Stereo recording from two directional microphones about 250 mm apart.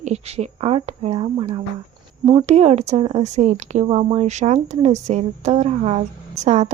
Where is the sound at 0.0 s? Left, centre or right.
Right.